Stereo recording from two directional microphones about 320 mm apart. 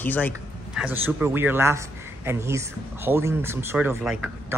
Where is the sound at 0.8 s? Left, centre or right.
Centre.